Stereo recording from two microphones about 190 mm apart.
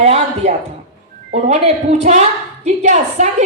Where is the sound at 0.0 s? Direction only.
35° right (ahead or behind).